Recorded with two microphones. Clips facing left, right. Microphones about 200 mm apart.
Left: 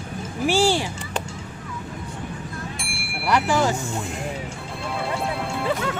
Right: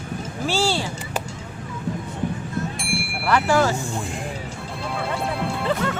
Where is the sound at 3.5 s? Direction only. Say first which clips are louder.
Right 3 dB; 15° left (ahead or behind).